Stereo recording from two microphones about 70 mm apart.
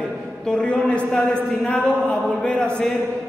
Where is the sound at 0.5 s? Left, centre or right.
Centre.